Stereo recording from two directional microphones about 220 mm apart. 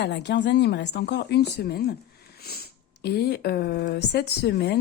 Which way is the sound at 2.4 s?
45° left (ahead or behind).